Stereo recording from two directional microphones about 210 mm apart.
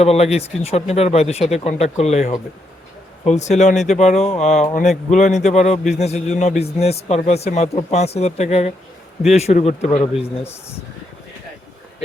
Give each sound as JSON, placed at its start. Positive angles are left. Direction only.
{"t": 0.0, "sound": "a man's voice", "side_deg": 30}
{"t": 10.2, "sound": "speech", "side_deg": 10}